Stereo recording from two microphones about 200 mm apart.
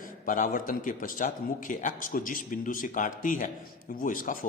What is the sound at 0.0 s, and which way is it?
A man's voice, 40° left (ahead or behind).